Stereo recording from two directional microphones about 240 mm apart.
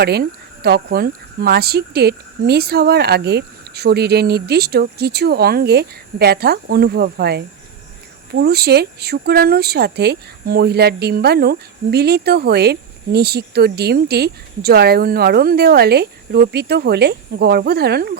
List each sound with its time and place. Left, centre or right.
0.0 s speech: right